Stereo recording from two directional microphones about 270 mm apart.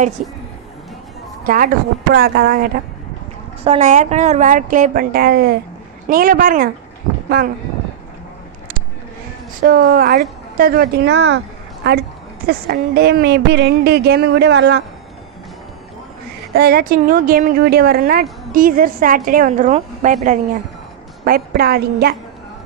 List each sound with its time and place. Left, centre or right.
0.2 s a woman's voice: right
1.4 s a woman's voice: right
9.6 s a woman's voice: right
16.5 s speech: right
21.2 s speech: right